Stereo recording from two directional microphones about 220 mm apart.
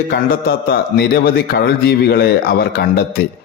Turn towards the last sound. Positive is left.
turn(degrees=40)  # may be behind; listen again after turning